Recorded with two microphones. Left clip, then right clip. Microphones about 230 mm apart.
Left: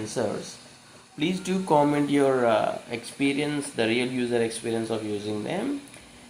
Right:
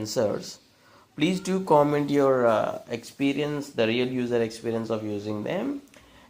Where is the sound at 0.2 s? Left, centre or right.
Right.